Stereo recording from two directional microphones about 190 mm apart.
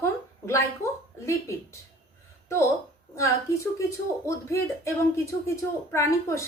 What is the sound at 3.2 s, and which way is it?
A woman's voice, 15° left (ahead or behind).